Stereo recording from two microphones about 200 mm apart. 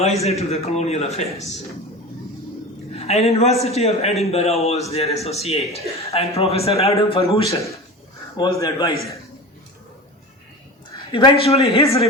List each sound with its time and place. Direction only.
0.0 s a man's voice: 30° left (ahead or behind)
3.0 s a man's voice: 30° left (ahead or behind)
8.4 s a man's voice: 15° left (ahead or behind)
11.1 s a man's voice: 25° left (ahead or behind)